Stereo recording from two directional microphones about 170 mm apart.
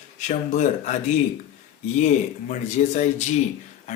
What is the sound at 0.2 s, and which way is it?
Speech, 45° left (ahead or behind).